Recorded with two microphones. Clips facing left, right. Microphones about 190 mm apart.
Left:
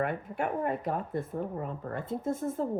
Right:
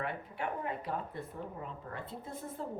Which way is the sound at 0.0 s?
50° left (ahead or behind).